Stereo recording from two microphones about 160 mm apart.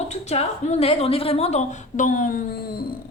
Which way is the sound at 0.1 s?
45° left (ahead or behind).